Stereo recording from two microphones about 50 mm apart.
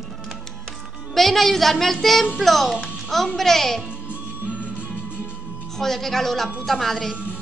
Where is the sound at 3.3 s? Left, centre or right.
Centre.